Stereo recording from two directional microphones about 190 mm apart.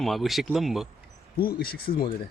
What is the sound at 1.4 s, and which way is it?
Speech, 50° left (ahead or behind).